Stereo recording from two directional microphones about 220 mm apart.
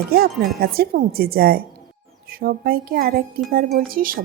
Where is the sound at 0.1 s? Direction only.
45° right (ahead or behind).